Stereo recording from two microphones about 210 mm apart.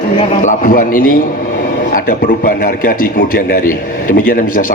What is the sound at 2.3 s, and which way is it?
A man's voice, 40° left (ahead or behind).